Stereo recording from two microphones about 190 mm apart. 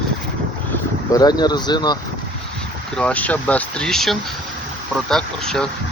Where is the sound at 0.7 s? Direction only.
20° left (ahead or behind).